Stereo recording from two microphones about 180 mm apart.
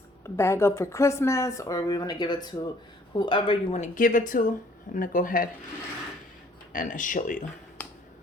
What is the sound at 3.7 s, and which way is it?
Speech, 50° left (ahead or behind).